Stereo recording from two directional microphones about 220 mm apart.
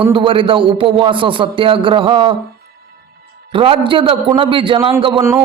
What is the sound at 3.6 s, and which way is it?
A man's voice, 25° right (ahead or behind).